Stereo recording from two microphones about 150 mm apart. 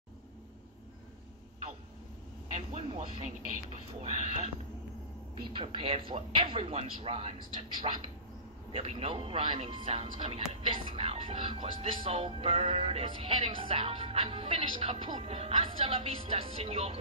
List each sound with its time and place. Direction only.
2.5 s vehicle: 50° right (ahead or behind)
4.0 s speech: 45° right (ahead or behind)
5.5 s speech: 35° right (ahead or behind)